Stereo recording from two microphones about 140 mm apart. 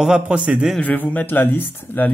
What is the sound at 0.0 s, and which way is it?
Speech, 5° right (ahead or behind).